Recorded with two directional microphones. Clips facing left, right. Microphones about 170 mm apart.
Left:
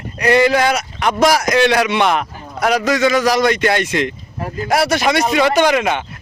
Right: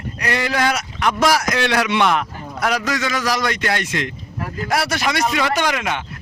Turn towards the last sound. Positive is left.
turn(degrees=25)  # may be behind; listen again after turning